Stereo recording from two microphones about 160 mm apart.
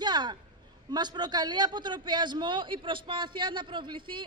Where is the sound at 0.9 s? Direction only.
25° right (ahead or behind).